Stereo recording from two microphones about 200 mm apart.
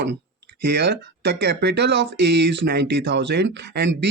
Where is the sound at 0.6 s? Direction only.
55° right (ahead or behind).